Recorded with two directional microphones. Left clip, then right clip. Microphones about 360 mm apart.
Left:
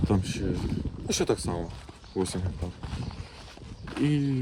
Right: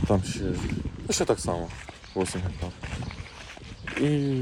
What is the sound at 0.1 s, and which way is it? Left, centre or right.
Speech, centre.